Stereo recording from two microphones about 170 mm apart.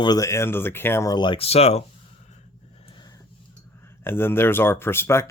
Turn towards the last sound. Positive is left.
turn(degrees=15)  # may be behind; listen again after turning